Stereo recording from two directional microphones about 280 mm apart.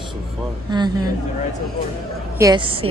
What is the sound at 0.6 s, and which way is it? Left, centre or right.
Speech, centre.